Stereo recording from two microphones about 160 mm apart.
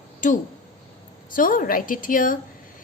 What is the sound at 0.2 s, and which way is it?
Speech, 50° left (ahead or behind).